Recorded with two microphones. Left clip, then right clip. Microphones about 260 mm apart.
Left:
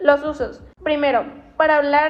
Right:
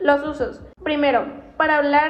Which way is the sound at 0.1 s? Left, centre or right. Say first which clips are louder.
Left 3 dB; left.